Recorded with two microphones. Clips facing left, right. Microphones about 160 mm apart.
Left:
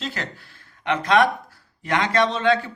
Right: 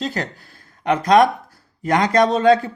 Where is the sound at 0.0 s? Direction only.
40° right (ahead or behind).